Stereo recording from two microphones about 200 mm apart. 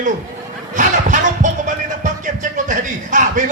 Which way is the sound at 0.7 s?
40° right (ahead or behind).